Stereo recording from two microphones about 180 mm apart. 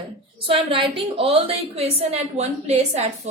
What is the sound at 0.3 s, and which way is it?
A woman's voice, 30° right (ahead or behind).